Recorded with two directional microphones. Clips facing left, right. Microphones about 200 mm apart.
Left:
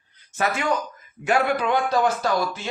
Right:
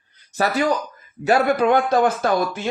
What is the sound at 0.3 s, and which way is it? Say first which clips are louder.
A man's voice: right 4 dB; 35° right (ahead or behind).